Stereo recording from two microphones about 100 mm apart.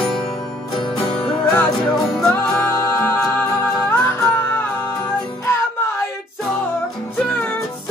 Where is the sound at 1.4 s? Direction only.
10° left (ahead or behind).